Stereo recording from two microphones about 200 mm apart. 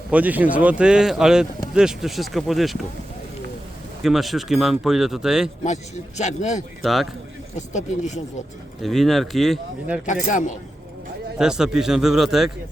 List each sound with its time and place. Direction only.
0.1 s speech: 10° right (ahead or behind)
4.0 s speech: centre (ahead or behind)
5.6 s a man's voice: 35° left (ahead or behind)
6.8 s speech: centre (ahead or behind)
7.5 s a man's voice: 35° left (ahead or behind)
8.8 s speech: centre (ahead or behind)
10.2 s a man's voice: 40° left (ahead or behind)
11.3 s speech: 5° right (ahead or behind)